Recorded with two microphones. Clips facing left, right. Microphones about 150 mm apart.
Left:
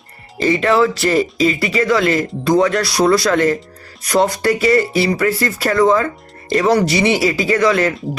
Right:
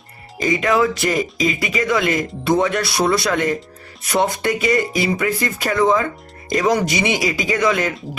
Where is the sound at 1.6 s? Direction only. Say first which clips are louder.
Left 4 dB; 15° right (ahead or behind).